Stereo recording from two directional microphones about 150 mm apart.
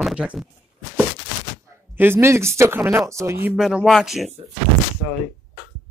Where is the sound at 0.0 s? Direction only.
5° right (ahead or behind).